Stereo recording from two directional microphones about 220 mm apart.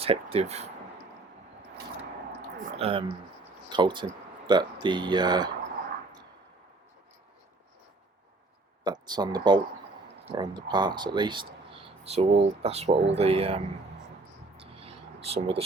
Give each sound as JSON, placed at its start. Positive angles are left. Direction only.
{"t": 0.0, "sound": "speech", "side_deg": -25}
{"t": 2.6, "sound": "speech", "side_deg": -25}
{"t": 8.8, "sound": "speech", "side_deg": -20}
{"t": 14.5, "sound": "a sound", "side_deg": -25}